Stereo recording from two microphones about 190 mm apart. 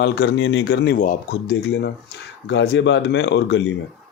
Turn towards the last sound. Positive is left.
turn(degrees=65)  # may be behind; listen again after turning